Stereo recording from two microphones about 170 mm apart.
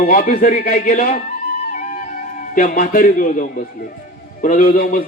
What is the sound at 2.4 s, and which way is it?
A man's voice, 55° left (ahead or behind).